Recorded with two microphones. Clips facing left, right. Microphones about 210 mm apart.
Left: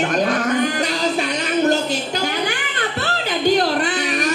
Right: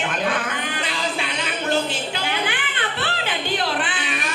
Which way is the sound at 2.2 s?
40° left (ahead or behind).